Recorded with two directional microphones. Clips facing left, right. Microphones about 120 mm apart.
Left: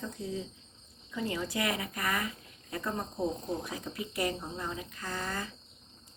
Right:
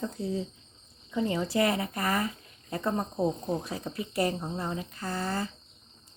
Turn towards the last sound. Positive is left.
turn(degrees=-30)  # may be behind; listen again after turning